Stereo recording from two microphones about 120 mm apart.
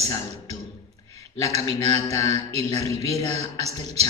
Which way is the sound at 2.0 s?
25° left (ahead or behind).